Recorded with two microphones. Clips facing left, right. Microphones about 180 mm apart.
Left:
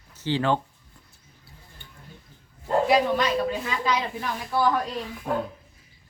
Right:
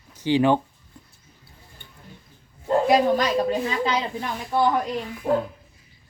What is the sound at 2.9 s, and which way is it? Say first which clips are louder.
A woman's voice: right 3 dB; 40° right (ahead or behind).